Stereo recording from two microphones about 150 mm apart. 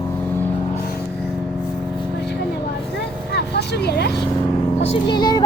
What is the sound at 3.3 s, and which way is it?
Vehicle, 90° left.